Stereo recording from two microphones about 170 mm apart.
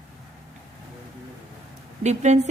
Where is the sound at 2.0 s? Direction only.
45° right (ahead or behind).